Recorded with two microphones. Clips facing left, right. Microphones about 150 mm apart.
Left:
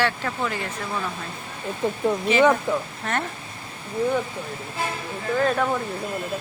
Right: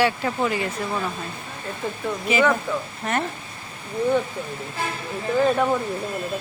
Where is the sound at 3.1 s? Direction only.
5° right (ahead or behind).